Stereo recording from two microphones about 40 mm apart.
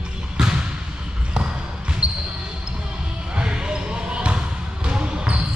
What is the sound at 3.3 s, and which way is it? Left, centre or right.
Basketball bounce, right.